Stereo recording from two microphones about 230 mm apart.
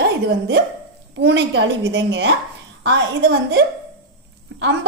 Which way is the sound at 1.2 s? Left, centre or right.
Right.